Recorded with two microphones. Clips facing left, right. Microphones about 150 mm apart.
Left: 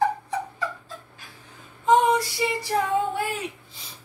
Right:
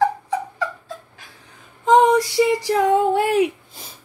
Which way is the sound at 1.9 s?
90° right.